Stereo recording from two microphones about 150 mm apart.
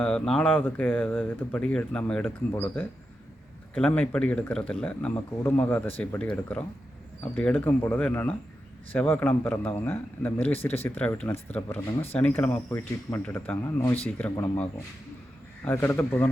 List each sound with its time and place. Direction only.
0.0 s speech: 5° left (ahead or behind)
3.8 s speech: 5° left (ahead or behind)